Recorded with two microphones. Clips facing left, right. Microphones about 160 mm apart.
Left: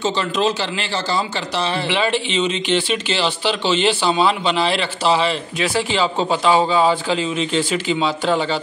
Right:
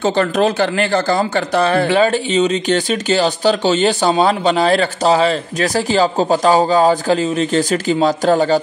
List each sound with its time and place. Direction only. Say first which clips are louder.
0.0 s speech: right 5 dB; 55° right (ahead or behind)